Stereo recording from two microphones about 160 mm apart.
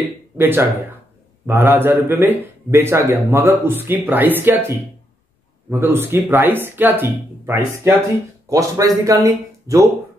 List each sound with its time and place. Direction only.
0.4 s speech: 15° right (ahead or behind)